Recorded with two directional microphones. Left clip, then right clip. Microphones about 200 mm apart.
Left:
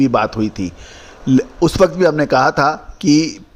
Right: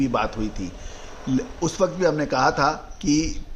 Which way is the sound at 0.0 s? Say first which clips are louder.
Left 8 dB; 35° left (ahead or behind).